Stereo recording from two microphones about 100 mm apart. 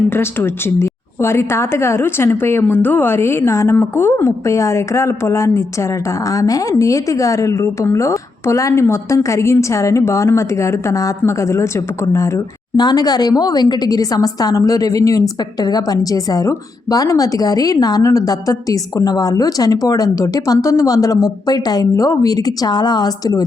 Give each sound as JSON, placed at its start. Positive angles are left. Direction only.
{"t": 0.1, "sound": "a woman's voice", "side_deg": 25}
{"t": 12.7, "sound": "a woman's voice", "side_deg": 45}